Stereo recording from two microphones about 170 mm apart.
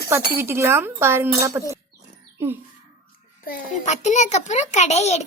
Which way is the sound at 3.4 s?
55° left (ahead or behind).